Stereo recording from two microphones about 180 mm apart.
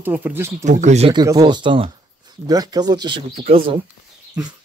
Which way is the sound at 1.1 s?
25° right (ahead or behind).